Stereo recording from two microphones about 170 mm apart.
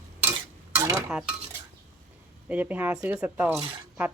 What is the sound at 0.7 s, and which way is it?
Dishes, 15° right (ahead or behind).